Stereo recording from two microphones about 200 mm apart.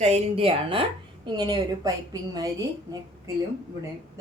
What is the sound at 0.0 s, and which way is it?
A woman's voice, 30° right (ahead or behind).